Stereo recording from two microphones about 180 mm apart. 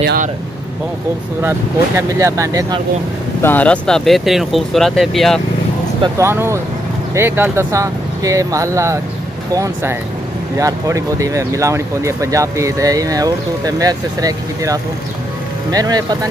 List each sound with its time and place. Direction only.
2.0 s speech: 15° right (ahead or behind)
3.4 s speech: 10° left (ahead or behind)
6.1 s speech: 15° right (ahead or behind)